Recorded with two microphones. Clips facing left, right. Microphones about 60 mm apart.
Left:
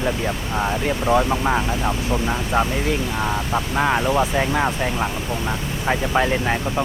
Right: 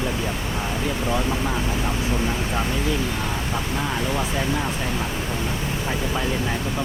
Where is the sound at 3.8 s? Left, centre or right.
Left.